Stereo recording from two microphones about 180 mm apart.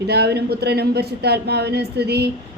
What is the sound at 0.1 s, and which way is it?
Speech, 65° right (ahead or behind).